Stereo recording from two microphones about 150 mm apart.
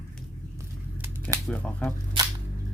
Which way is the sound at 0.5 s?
15° right (ahead or behind).